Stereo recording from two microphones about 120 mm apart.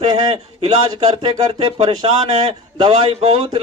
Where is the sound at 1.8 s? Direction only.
50° right (ahead or behind).